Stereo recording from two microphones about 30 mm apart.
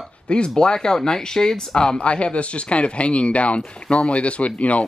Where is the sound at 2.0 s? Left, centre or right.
Left.